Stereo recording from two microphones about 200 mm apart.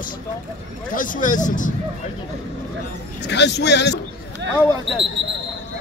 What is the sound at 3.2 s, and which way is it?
Speech, 60° left (ahead or behind).